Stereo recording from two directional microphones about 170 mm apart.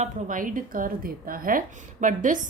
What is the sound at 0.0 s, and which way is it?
A woman's voice, 50° right (ahead or behind).